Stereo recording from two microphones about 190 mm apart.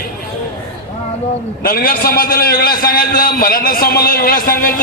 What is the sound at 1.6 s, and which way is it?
A man's voice, 50° left (ahead or behind).